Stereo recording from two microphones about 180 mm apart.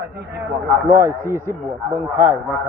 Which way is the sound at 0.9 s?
15° right (ahead or behind).